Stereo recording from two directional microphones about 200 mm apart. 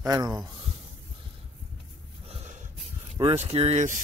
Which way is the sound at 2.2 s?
35° right (ahead or behind).